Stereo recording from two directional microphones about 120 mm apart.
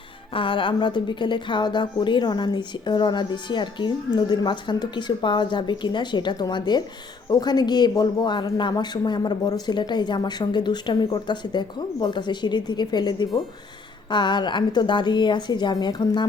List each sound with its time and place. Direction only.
0.3 s speech: 45° left (ahead or behind)